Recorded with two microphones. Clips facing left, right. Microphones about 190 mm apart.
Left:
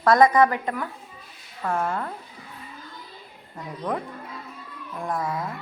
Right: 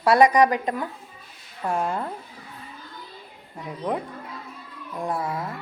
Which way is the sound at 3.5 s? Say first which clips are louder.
Right 1 dB; 10° right (ahead or behind).